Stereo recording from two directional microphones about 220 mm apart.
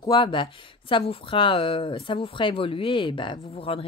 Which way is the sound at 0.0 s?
20° left (ahead or behind).